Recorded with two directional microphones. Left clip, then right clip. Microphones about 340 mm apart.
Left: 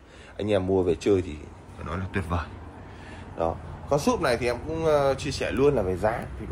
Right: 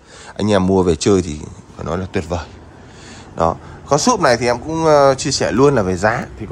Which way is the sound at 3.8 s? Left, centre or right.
Right.